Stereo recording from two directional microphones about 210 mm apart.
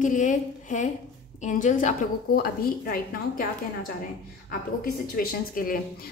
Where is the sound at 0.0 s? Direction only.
35° left (ahead or behind).